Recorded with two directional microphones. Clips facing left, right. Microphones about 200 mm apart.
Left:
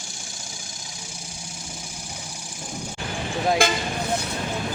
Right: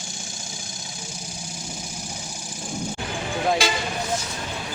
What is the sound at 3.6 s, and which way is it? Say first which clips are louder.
Speech: left 2 dB; 55° left (ahead or behind).